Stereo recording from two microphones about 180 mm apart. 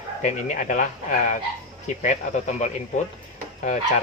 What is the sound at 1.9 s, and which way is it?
Speech, 40° left (ahead or behind).